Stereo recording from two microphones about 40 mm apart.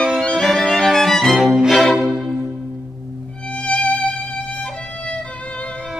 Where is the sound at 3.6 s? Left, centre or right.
Left.